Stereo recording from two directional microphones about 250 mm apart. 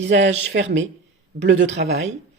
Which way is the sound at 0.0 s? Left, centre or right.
Right.